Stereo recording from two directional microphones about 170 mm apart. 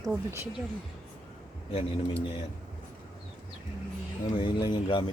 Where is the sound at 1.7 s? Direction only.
35° left (ahead or behind).